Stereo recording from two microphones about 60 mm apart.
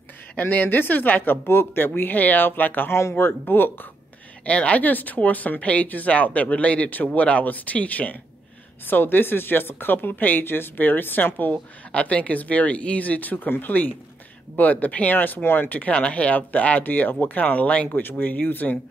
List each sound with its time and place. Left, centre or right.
0.4 s speech: left
2.9 s speech: left
4.5 s speech: left
11.9 s speech: left